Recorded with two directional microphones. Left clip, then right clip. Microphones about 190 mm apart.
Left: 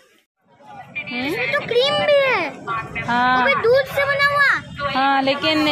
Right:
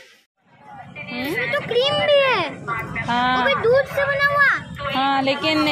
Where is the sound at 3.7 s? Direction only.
20° left (ahead or behind).